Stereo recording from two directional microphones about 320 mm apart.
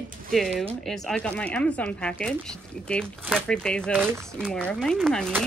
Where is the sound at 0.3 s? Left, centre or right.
Centre.